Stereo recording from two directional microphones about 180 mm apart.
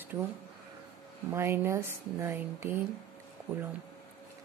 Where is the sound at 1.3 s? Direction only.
15° right (ahead or behind).